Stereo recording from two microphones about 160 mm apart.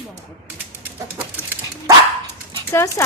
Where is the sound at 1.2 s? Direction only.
15° right (ahead or behind).